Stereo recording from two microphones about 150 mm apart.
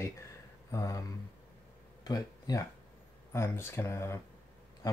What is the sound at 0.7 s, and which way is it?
Speech, 20° left (ahead or behind).